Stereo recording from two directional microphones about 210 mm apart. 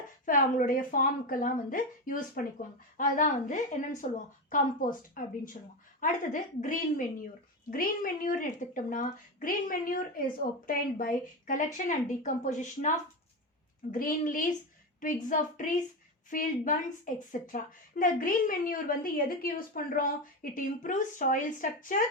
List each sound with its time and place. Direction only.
0.3 s a woman's voice: 40° left (ahead or behind)
13.9 s a woman's voice: 40° left (ahead or behind)